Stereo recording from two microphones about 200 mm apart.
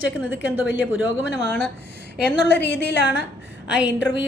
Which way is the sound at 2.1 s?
55° left (ahead or behind).